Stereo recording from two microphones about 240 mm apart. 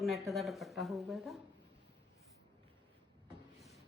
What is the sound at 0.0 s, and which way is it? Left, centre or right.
A woman's voice, centre.